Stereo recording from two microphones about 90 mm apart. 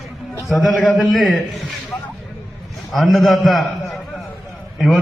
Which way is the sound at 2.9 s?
Centre (ahead or behind).